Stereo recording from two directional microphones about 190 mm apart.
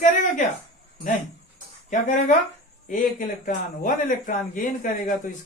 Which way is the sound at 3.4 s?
45° left (ahead or behind).